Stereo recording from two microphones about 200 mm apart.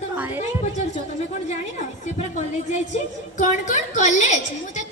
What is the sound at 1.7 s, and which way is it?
A woman's voice, 35° left (ahead or behind).